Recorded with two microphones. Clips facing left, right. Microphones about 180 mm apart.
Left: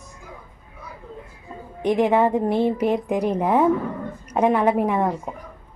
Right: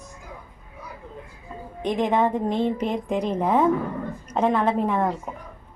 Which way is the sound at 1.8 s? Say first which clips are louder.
Left 4 dB; 10° left (ahead or behind).